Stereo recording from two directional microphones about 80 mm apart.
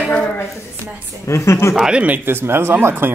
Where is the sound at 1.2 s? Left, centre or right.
Left.